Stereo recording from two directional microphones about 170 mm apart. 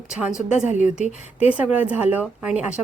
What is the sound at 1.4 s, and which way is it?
Speech, 10° right (ahead or behind).